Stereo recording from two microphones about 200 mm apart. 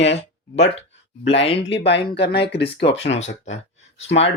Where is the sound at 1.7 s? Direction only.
60° left (ahead or behind).